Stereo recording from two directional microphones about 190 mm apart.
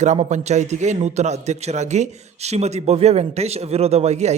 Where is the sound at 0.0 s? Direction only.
35° right (ahead or behind).